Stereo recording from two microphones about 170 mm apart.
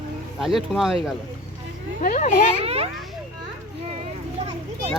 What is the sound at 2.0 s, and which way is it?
Speech, 50° left (ahead or behind).